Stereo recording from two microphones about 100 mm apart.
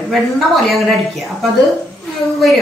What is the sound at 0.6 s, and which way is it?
Speech, centre (ahead or behind).